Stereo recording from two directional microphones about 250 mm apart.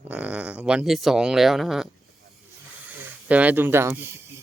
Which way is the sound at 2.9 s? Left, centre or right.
Centre.